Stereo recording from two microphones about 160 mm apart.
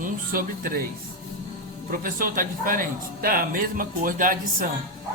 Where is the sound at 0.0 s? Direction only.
60° right (ahead or behind).